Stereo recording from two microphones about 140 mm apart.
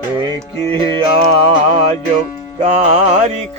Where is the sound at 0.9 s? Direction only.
45° right (ahead or behind).